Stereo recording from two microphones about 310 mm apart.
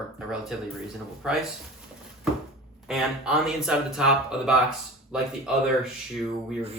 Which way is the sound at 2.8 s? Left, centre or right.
Centre.